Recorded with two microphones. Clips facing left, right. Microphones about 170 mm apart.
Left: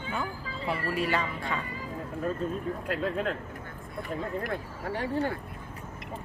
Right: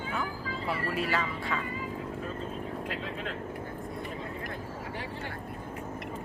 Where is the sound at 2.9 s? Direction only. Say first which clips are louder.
Left 6 dB; 45° left (ahead or behind).